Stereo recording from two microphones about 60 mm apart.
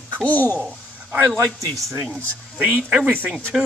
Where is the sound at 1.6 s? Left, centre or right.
Right.